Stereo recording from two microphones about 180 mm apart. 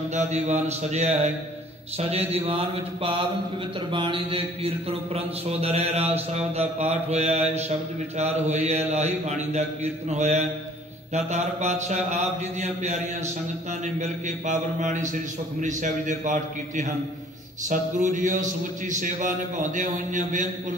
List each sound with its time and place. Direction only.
0.1 s mantra: 40° right (ahead or behind)
13.9 s a man's voice: 40° right (ahead or behind)